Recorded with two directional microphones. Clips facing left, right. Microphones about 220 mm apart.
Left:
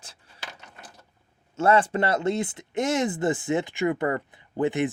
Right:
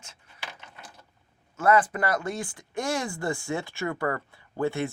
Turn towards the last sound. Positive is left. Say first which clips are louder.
# left 3 dB
turn(degrees=20)  # may be behind; listen again after turning